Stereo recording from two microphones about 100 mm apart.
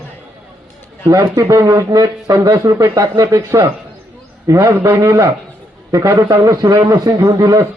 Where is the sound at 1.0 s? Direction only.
35° right (ahead or behind).